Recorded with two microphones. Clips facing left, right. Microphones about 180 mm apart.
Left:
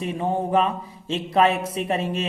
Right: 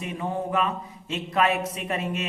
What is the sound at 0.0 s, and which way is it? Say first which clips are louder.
A man's voice: left 5 dB; 30° left (ahead or behind).